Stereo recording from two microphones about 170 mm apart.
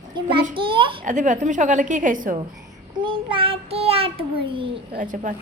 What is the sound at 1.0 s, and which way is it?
A woman's voice, 45° right (ahead or behind).